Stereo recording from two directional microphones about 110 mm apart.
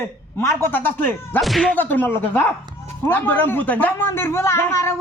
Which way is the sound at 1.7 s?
15° left (ahead or behind).